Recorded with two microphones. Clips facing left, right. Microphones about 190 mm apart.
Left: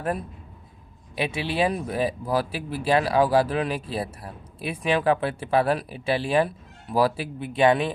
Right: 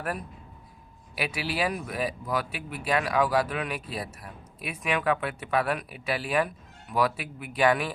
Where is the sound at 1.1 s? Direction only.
25° left (ahead or behind).